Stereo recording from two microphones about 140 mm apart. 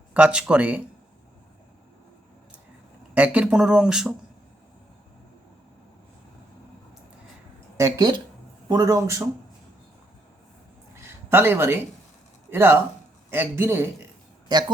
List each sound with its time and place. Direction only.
0.1 s speech: 10° right (ahead or behind)
3.2 s speech: 10° right (ahead or behind)
7.8 s speech: 25° right (ahead or behind)
10.9 s a sound: 15° right (ahead or behind)
12.5 s speech: 15° right (ahead or behind)